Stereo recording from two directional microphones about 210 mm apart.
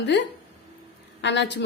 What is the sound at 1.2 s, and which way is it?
Speech, 55° left (ahead or behind).